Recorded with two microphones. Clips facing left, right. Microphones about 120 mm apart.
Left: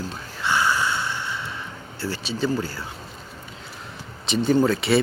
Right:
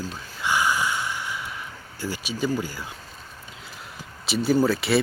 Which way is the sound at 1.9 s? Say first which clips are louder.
Left 2 dB; 15° right (ahead or behind).